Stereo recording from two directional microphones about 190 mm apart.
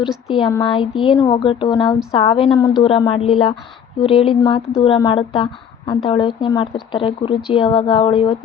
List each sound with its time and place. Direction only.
0.0 s speech: centre (ahead or behind)
0.3 s a woman's voice: 25° left (ahead or behind)